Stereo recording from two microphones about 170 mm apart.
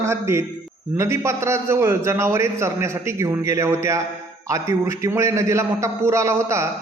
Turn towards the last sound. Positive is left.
turn(degrees=-15)  # may be behind; listen again after turning